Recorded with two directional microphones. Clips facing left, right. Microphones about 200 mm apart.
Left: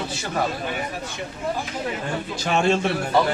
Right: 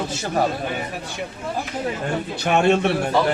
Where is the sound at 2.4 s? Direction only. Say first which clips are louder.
Right 3 dB; 60° right (ahead or behind).